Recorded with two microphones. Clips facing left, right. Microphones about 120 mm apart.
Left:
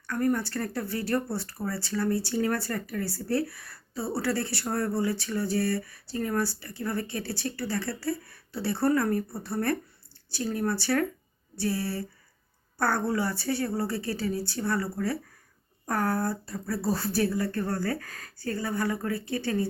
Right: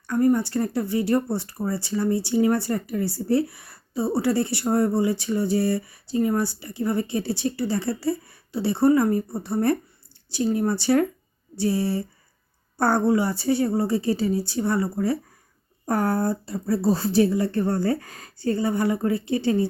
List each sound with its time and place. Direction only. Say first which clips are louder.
0.1 s speech: right 7 dB; 20° right (ahead or behind)